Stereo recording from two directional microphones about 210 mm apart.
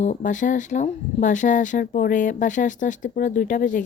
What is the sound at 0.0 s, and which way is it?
Speech, 35° left (ahead or behind).